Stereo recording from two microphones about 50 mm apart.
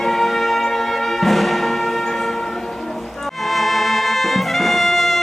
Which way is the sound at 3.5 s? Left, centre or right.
Centre.